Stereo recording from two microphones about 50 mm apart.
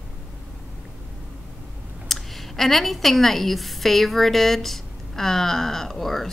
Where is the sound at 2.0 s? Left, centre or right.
Centre.